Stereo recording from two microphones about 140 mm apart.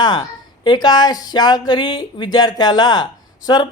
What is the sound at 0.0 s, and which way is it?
A man's voice, 30° left (ahead or behind).